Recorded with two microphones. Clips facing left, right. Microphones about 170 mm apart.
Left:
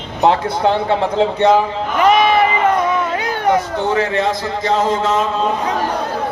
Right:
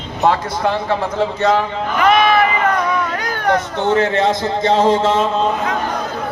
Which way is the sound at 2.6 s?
25° left (ahead or behind).